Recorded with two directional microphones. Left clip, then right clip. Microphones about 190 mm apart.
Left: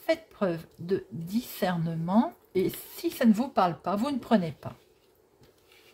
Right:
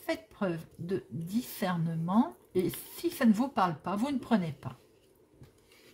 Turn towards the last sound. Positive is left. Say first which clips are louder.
# left 5 dB
turn(degrees=10)  # may be behind; listen again after turning